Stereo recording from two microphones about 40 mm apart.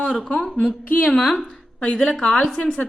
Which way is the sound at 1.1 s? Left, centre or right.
Left.